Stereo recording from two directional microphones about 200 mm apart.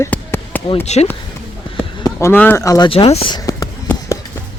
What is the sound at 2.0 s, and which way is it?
Speech, 10° left (ahead or behind).